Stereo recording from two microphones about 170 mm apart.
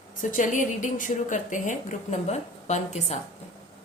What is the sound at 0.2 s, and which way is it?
A woman's voice, 50° left (ahead or behind).